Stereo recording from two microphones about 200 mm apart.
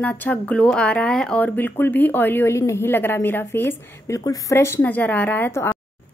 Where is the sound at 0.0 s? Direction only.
10° left (ahead or behind).